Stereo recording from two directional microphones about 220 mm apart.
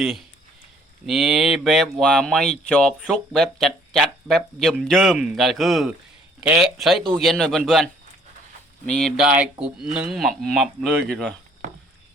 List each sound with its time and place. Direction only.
0.0 s speech: centre (ahead or behind)
8.9 s speech: centre (ahead or behind)